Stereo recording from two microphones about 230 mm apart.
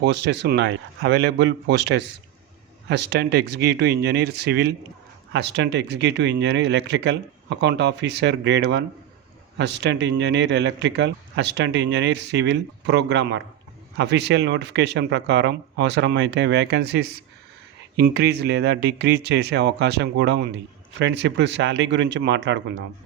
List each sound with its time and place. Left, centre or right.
0.0 s speech: right